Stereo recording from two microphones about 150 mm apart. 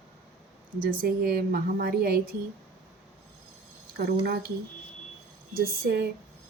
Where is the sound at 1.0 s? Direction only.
90° right.